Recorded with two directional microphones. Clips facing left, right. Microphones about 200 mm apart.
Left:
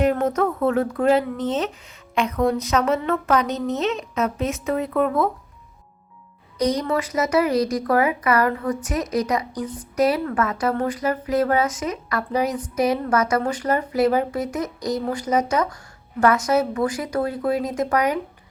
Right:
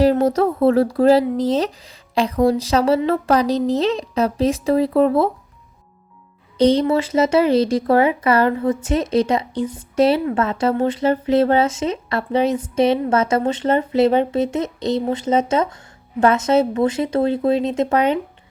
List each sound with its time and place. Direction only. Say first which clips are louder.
0.0 s speech: right 5 dB; 30° right (ahead or behind)
6.6 s speech: right 7 dB; 30° right (ahead or behind)